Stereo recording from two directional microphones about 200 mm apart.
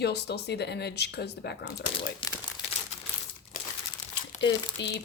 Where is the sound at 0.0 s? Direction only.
55° left (ahead or behind).